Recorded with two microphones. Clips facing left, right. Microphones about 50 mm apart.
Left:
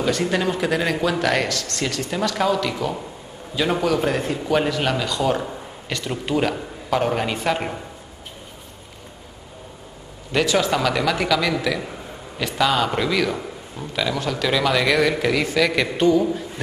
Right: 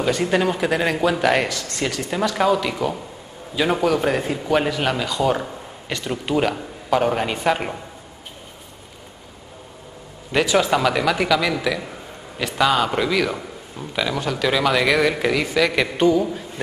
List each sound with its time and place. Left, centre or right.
0.0 s a man's voice: centre
10.3 s a man's voice: centre